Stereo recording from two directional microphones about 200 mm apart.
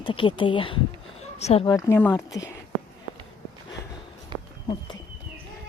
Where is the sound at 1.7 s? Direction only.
15° left (ahead or behind).